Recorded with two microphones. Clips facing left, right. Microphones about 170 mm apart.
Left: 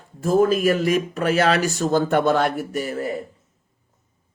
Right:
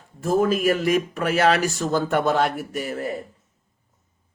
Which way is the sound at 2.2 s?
45° left (ahead or behind).